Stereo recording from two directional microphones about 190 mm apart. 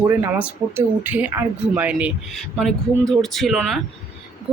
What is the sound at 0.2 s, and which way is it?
Speech, 10° right (ahead or behind).